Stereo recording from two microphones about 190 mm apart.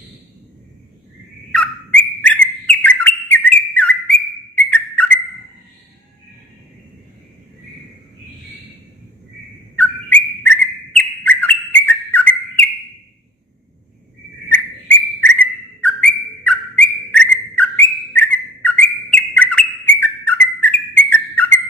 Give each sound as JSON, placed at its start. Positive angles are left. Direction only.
{"t": 1.5, "sound": "bird", "side_deg": 5}
{"t": 4.6, "sound": "whistle", "side_deg": 5}
{"t": 9.8, "sound": "bird", "side_deg": 5}
{"t": 14.9, "sound": "bird", "side_deg": 10}